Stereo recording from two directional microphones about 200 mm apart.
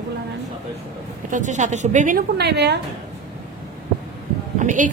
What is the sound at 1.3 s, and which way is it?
A woman's voice, 40° right (ahead or behind).